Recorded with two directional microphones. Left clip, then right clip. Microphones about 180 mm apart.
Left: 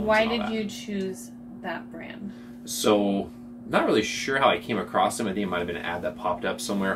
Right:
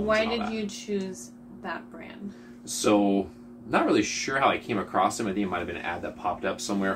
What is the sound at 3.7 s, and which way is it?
Speech, 15° left (ahead or behind).